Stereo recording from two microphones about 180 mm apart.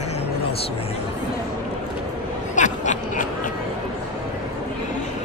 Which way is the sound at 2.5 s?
45° left (ahead or behind).